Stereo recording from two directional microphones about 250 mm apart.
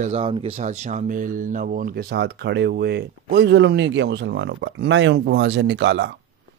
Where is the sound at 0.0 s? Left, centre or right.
Right.